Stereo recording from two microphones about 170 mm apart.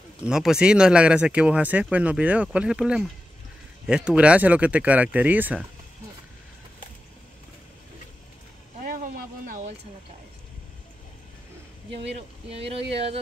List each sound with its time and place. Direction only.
0.2 s speech: 5° right (ahead or behind)
8.8 s a sound: 55° right (ahead or behind)
12.4 s speech: 35° right (ahead or behind)